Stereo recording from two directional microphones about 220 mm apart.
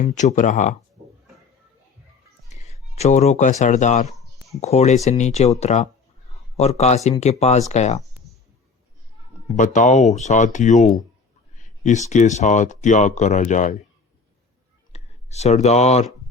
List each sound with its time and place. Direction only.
0.0 s speech: 35° left (ahead or behind)
2.5 s a sound: 30° left (ahead or behind)
3.6 s speech: 35° left (ahead or behind)
9.6 s speech: 35° left (ahead or behind)
14.9 s speech: 30° left (ahead or behind)